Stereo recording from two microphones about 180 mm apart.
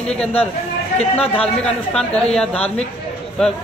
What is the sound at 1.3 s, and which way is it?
A man's voice, 5° left (ahead or behind).